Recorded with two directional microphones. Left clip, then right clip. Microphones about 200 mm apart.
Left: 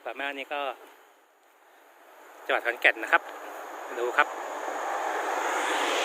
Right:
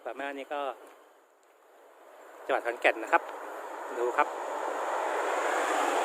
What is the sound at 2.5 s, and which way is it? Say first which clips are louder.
Speech: left 3 dB; 10° right (ahead or behind).